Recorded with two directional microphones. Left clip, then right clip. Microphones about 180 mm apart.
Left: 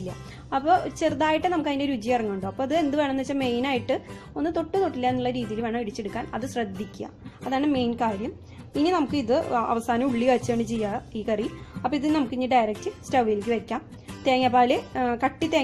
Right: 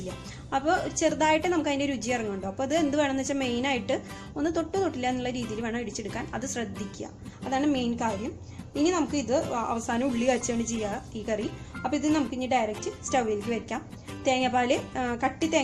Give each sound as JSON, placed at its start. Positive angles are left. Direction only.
{"t": 0.5, "sound": "a woman's voice", "side_deg": 35}